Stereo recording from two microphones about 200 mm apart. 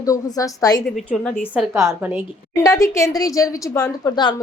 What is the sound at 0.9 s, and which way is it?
Speech, centre (ahead or behind).